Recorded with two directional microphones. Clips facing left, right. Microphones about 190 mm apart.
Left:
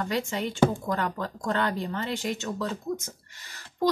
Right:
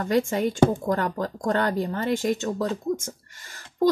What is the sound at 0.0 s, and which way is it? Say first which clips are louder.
Speech: right 6 dB; 50° right (ahead or behind).